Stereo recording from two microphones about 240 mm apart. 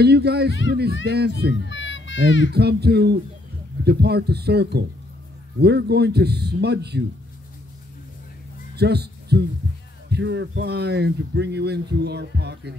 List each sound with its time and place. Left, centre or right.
0.0 s speech: right
1.7 s children playing: left
2.5 s speech: right
8.7 s a sound: right
10.0 s speech: right